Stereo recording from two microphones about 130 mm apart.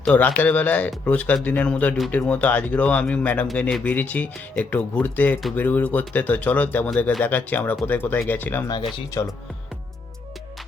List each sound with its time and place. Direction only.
0.0 s speech: 10° left (ahead or behind)
8.6 s speech: 30° left (ahead or behind)